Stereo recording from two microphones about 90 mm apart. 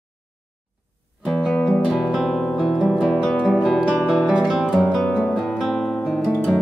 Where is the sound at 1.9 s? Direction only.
Centre (ahead or behind).